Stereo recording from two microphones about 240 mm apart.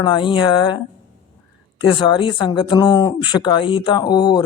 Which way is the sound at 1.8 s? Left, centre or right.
Left.